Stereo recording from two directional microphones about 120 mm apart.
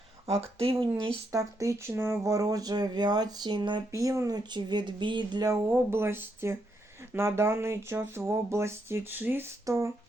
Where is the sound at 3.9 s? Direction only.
25° right (ahead or behind).